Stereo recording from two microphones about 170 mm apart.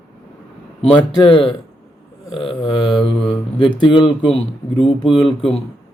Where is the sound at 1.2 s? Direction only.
30° left (ahead or behind).